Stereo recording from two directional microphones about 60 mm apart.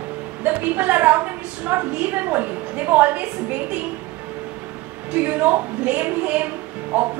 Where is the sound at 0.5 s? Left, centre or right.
Right.